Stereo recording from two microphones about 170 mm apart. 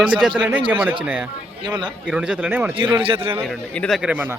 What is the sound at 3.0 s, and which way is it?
Speech, 30° right (ahead or behind).